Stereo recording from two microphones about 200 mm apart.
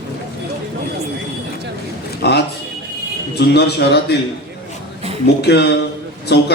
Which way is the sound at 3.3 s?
55° left (ahead or behind).